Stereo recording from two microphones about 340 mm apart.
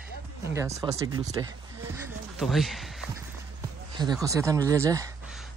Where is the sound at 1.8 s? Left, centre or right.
Centre.